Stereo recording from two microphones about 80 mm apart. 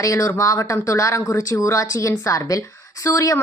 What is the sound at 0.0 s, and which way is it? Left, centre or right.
A woman's voice, left.